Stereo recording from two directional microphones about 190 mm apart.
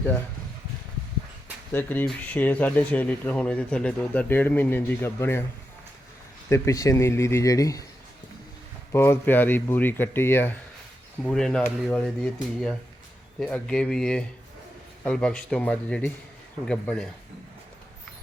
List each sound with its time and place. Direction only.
1.7 s speech: 10° left (ahead or behind)
6.5 s speech: 15° left (ahead or behind)
8.9 s speech: 15° left (ahead or behind)